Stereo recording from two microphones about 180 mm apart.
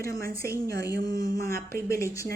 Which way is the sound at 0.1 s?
20° left (ahead or behind).